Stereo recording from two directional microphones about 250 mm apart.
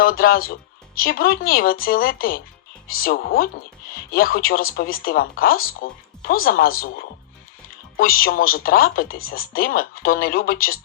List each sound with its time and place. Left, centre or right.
0.0 s speech: left